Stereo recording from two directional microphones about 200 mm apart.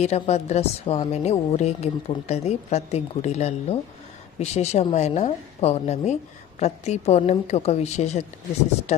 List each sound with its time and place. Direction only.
0.0 s a woman's voice: 35° left (ahead or behind)